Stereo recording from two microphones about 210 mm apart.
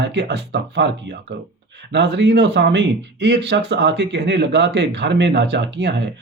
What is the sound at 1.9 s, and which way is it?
Speech, 55° right (ahead or behind).